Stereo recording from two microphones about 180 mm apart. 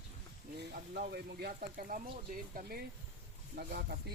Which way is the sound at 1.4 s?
55° right (ahead or behind).